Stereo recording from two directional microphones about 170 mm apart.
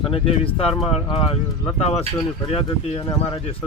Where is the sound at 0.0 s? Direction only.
30° left (ahead or behind).